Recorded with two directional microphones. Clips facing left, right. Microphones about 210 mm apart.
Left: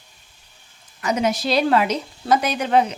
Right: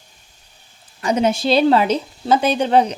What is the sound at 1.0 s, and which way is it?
A woman's voice, 30° right (ahead or behind).